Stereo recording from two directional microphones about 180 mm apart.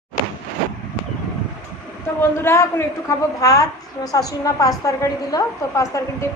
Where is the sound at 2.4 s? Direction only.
15° left (ahead or behind).